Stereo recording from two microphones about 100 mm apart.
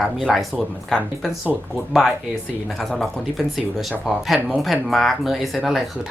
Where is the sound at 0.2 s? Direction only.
Centre (ahead or behind).